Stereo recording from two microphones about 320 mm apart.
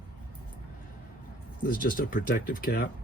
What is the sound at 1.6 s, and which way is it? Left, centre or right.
Speech, left.